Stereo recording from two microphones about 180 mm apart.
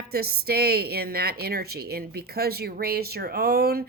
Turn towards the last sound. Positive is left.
turn(degrees=-60)  # may be behind; listen again after turning